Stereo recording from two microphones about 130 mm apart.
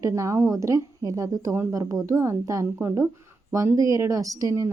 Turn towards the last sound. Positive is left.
turn(degrees=-25)  # may be behind; listen again after turning